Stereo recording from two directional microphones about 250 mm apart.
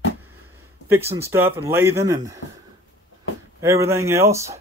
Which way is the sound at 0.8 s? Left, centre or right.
Centre.